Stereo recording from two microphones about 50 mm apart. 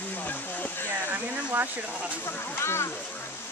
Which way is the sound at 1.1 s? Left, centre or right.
Right.